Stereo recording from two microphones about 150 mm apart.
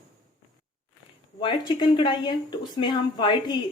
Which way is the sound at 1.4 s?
30° left (ahead or behind).